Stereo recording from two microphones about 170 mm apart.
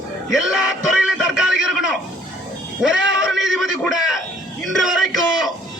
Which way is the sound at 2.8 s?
5° right (ahead or behind).